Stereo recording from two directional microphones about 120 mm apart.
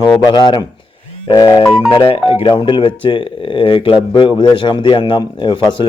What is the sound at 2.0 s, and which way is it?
Speech, 55° left (ahead or behind).